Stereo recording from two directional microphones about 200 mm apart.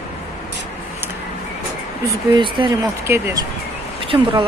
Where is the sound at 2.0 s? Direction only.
25° right (ahead or behind).